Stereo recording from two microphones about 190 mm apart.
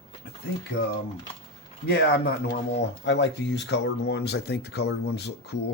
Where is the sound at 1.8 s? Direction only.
60° left (ahead or behind).